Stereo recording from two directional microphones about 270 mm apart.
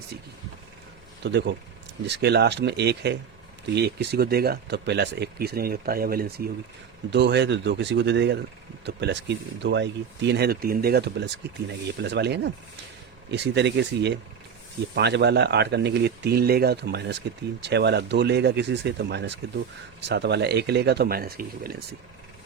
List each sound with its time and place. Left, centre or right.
1.2 s speech: right